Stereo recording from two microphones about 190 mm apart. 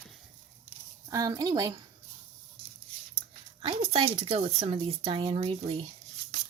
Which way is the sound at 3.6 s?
30° right (ahead or behind).